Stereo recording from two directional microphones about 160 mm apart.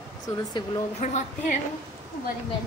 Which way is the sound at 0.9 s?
50° left (ahead or behind).